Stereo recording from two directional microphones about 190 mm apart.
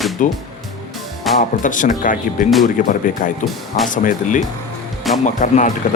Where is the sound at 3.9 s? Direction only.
45° left (ahead or behind).